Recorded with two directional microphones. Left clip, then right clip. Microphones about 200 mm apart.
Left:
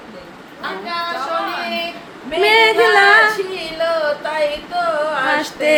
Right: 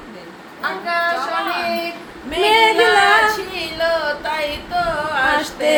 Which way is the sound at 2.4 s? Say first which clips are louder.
Left 1 dB; 15° left (ahead or behind).